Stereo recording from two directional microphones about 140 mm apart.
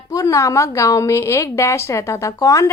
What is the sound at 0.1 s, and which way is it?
A woman's voice, 25° left (ahead or behind).